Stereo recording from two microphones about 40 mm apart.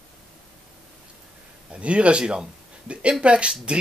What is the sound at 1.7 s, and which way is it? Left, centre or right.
A man's voice, right.